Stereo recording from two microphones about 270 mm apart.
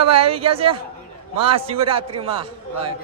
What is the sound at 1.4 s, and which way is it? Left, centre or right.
Speech, centre.